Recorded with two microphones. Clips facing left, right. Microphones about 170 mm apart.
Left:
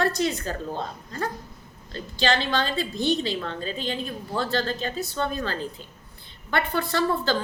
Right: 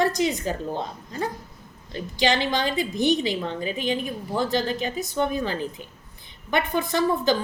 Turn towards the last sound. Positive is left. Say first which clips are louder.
# right 2 dB
turn(degrees=-15)  # may be behind; listen again after turning